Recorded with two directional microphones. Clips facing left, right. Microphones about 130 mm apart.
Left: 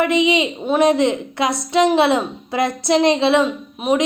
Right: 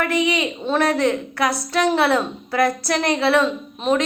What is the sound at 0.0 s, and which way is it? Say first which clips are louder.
A woman's voice: left 4 dB; 20° left (ahead or behind).